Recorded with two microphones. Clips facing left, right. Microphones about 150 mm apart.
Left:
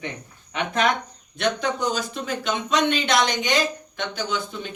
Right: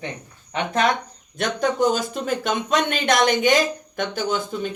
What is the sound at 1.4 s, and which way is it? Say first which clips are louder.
Speech: right 3 dB; 45° right (ahead or behind).